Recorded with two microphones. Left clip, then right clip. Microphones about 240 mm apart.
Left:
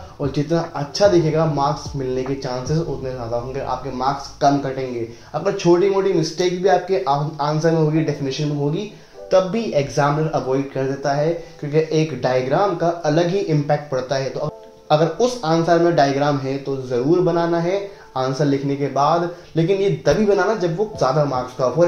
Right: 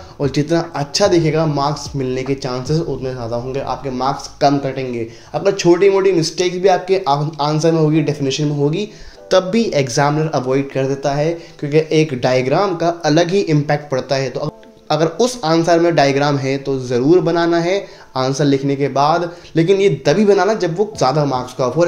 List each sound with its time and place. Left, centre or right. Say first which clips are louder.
0.2 s speech: right 4 dB; right
3.6 s a man's voice: right 2 dB; right
19.5 s a man's voice: right 6 dB; right